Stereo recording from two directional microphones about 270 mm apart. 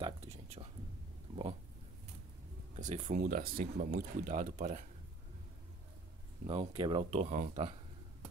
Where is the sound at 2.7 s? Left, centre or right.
Right.